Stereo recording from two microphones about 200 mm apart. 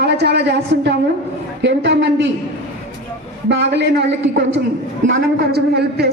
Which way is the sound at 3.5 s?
60° right (ahead or behind).